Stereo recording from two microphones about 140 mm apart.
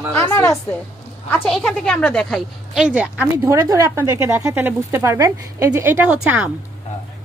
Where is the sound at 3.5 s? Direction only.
25° right (ahead or behind).